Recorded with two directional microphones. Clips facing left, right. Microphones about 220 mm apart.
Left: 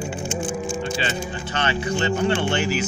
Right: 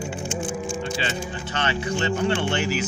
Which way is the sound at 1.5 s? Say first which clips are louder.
Left 2 dB; 40° left (ahead or behind).